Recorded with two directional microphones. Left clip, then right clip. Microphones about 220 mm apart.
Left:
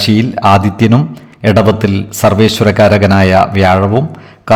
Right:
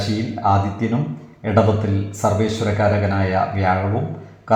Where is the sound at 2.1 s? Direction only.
40° left (ahead or behind).